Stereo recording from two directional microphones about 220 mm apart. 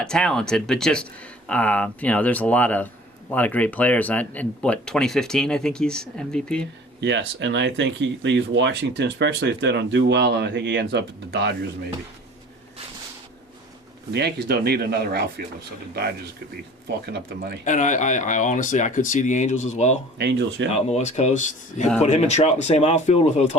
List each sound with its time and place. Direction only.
0.0 s speech: 5° left (ahead or behind)
7.0 s speech: 55° right (ahead or behind)
14.1 s speech: 50° right (ahead or behind)
17.7 s speech: 35° left (ahead or behind)
20.1 s speech: 50° right (ahead or behind)
20.7 s speech: 30° left (ahead or behind)